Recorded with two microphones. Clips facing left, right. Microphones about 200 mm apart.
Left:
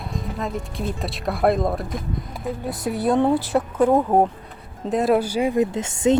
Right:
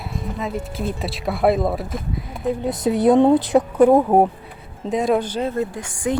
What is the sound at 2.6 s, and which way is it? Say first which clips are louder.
Speech: right 6 dB; 20° right (ahead or behind).